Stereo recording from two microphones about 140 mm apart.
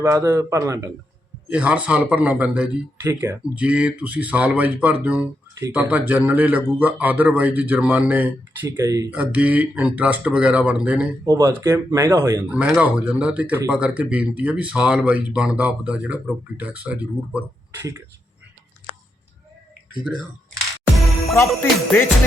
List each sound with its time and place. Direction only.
0.0 s speech: 20° right (ahead or behind)
1.5 s speech: 10° right (ahead or behind)
3.0 s speech: 20° right (ahead or behind)
9.0 s speech: 10° right (ahead or behind)
11.3 s speech: 25° right (ahead or behind)
12.5 s speech: 5° right (ahead or behind)
21.3 s jingle bell: 15° left (ahead or behind)